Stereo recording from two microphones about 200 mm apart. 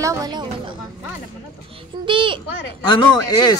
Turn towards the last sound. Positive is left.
turn(degrees=20)  # may be behind; listen again after turning